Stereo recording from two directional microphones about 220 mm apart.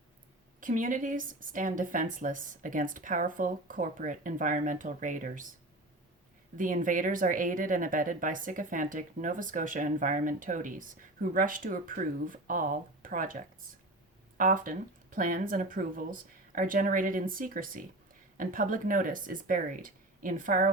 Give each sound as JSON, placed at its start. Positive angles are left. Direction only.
{"t": 0.6, "sound": "speech", "side_deg": -35}
{"t": 6.6, "sound": "speech", "side_deg": -35}